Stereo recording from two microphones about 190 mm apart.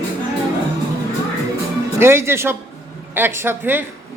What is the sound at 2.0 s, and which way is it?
A woman's voice, 15° right (ahead or behind).